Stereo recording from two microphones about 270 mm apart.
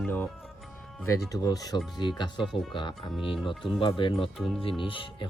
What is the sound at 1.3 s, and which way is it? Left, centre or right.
Speech, centre.